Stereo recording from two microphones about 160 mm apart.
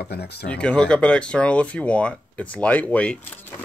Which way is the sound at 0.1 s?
90° left.